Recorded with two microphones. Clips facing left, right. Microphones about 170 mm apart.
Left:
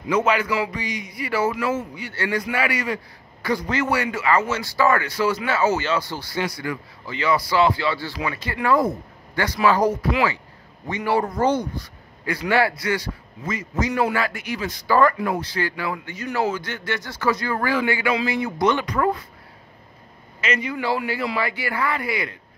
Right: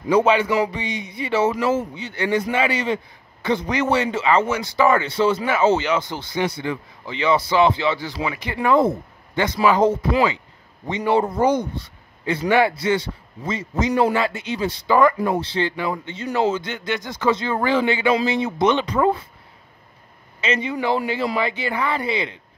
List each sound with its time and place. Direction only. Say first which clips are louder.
0.1 s speech: right 4 dB; 30° right (ahead or behind)
20.4 s speech: right 2 dB; 25° right (ahead or behind)